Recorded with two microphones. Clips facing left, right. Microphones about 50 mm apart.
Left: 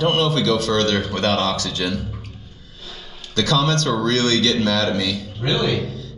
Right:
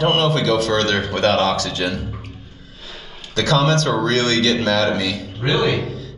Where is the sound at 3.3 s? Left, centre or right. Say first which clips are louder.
Right 2 dB; centre.